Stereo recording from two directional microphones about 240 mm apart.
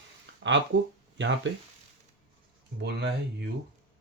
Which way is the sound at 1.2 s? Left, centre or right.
Right.